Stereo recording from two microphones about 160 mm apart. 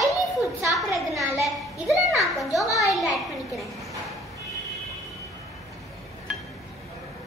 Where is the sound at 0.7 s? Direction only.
Centre (ahead or behind).